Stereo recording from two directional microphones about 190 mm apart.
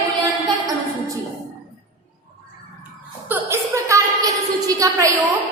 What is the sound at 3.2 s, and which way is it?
A woman's voice, 15° right (ahead or behind).